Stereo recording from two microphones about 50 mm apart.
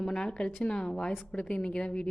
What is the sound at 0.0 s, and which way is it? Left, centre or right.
A woman's voice, centre.